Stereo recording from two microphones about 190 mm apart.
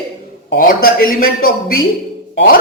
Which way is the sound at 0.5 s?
50° left (ahead or behind).